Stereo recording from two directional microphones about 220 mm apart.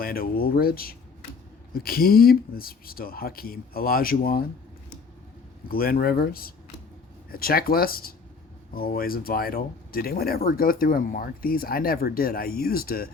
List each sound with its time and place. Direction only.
0.0 s speech: 40° left (ahead or behind)
5.6 s speech: 40° left (ahead or behind)